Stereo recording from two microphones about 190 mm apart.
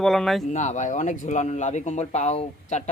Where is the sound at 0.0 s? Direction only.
Centre (ahead or behind).